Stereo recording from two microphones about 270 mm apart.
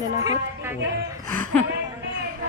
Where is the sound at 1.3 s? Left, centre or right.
Centre.